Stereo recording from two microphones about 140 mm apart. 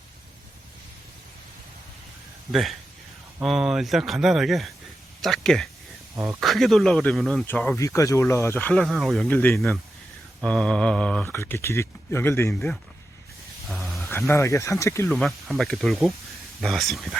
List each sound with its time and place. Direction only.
2.5 s speech: centre (ahead or behind)
7.4 s speech: 15° left (ahead or behind)
8.7 s speech: centre (ahead or behind)
11.3 s speech: 20° left (ahead or behind)
12.5 s speech: 5° left (ahead or behind)
13.8 s a sound: centre (ahead or behind)
14.1 s speech: 20° left (ahead or behind)
15.1 s speech: centre (ahead or behind)